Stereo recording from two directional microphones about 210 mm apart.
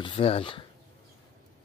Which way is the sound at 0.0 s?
25° left (ahead or behind).